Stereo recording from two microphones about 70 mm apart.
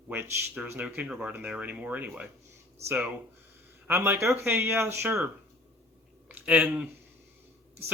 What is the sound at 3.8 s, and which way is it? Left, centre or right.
Speech, right.